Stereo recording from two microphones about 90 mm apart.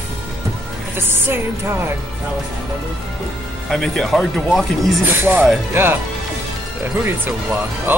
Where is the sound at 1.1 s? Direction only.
25° right (ahead or behind).